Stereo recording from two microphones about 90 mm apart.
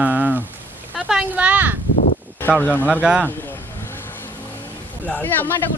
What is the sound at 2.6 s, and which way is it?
Speech, 20° left (ahead or behind).